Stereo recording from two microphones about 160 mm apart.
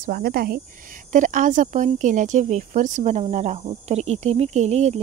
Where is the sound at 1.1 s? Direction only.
55° right (ahead or behind).